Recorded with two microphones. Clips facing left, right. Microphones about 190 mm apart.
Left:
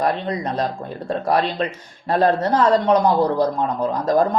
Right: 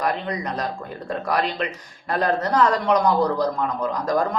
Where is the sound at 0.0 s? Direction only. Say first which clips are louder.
Left 3 dB; 30° left (ahead or behind).